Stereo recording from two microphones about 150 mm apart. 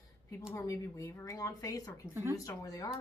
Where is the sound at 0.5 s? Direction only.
20° left (ahead or behind).